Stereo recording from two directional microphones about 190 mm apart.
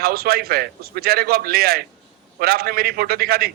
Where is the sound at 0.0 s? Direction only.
55° right (ahead or behind).